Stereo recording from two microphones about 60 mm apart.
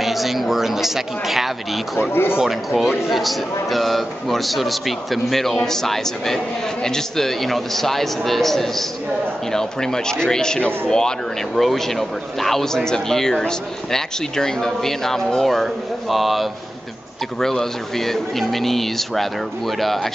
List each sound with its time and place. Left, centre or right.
0.0 s speech: centre
2.0 s speech: left
2.3 s speech: centre